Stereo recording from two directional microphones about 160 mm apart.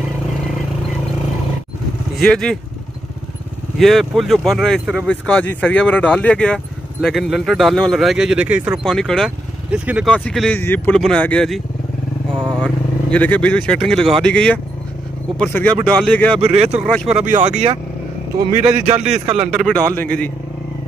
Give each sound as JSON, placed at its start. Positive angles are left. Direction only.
{"t": 2.2, "sound": "speech", "side_deg": 5}
{"t": 3.7, "sound": "speech", "side_deg": 0}
{"t": 8.8, "sound": "speech", "side_deg": 5}
{"t": 9.7, "sound": "speech", "side_deg": -10}
{"t": 10.0, "sound": "speech", "side_deg": 5}
{"t": 16.3, "sound": "speech", "side_deg": -40}
{"t": 16.8, "sound": "speech", "side_deg": 0}
{"t": 17.2, "sound": "a man's voice", "side_deg": -50}
{"t": 18.9, "sound": "a man's voice", "side_deg": -45}
{"t": 19.5, "sound": "speech", "side_deg": 5}